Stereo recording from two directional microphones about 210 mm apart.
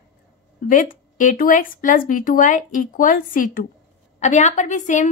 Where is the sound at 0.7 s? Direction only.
40° left (ahead or behind).